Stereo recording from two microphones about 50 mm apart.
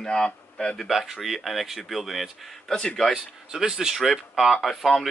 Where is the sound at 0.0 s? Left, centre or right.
Centre.